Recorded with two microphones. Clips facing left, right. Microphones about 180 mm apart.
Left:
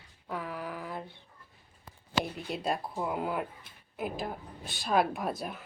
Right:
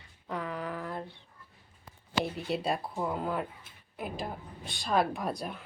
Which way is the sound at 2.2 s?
Centre (ahead or behind).